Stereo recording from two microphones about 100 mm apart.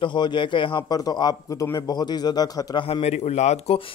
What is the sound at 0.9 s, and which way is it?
Speech, 40° left (ahead or behind).